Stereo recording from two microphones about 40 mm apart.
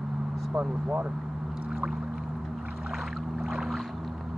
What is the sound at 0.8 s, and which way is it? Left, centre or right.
Speech, right.